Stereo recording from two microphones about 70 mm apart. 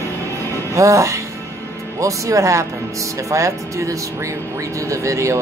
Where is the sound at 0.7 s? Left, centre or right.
Right.